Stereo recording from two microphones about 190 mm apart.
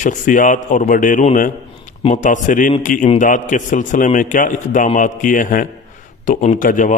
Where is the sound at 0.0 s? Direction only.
40° left (ahead or behind).